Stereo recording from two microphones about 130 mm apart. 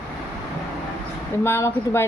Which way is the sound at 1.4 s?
20° left (ahead or behind).